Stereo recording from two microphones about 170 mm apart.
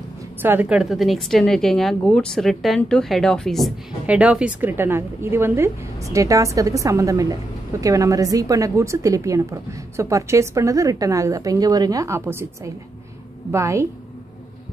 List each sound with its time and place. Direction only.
0.4 s a woman's voice: 10° right (ahead or behind)